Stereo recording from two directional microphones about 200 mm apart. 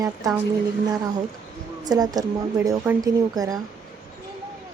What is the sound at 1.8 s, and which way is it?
Speech, 20° right (ahead or behind).